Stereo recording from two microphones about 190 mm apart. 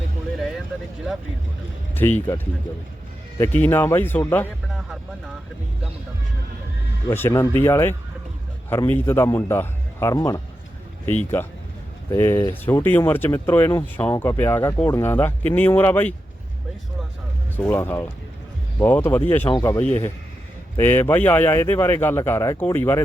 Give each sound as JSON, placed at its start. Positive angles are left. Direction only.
{"t": 2.0, "sound": "speech", "side_deg": 10}
{"t": 7.1, "sound": "speech", "side_deg": 15}
{"t": 17.6, "sound": "speech", "side_deg": 10}